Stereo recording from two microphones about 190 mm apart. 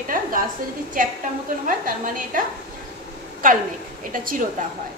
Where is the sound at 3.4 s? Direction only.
45° right (ahead or behind).